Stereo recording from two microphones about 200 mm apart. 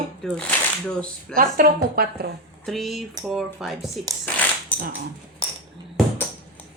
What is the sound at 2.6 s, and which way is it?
Speech, centre (ahead or behind).